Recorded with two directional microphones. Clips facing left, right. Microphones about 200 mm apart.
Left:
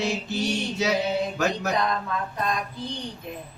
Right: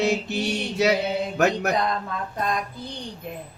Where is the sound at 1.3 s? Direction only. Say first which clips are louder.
Right 4 dB; 65° right (ahead or behind).